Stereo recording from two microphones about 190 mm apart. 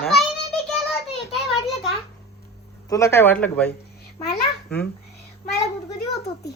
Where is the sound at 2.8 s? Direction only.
15° left (ahead or behind).